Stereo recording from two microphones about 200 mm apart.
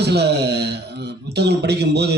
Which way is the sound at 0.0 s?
55° right (ahead or behind).